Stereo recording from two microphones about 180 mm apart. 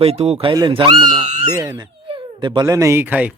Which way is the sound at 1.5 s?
15° right (ahead or behind).